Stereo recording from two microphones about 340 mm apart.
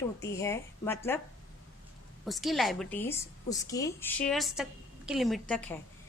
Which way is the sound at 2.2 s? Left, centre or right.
Centre.